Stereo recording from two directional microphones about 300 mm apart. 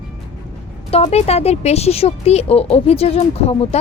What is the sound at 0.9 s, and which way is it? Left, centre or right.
A woman's voice, centre.